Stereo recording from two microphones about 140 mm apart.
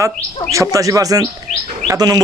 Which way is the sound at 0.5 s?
25° right (ahead or behind).